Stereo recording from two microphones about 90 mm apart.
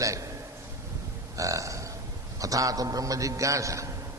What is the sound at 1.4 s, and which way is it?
A man's voice, 35° right (ahead or behind).